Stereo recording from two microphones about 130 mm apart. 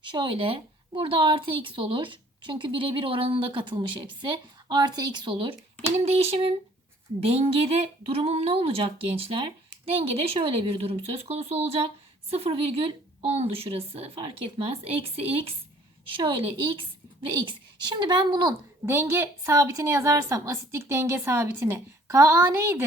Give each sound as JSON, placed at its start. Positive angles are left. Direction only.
{"t": 0.0, "sound": "a woman's voice", "side_deg": -35}
{"t": 17.3, "sound": "a woman's voice", "side_deg": -35}
{"t": 18.9, "sound": "a woman's voice", "side_deg": -20}